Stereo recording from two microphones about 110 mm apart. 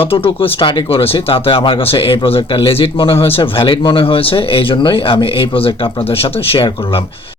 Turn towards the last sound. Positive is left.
turn(degrees=50)  # may be behind; listen again after turning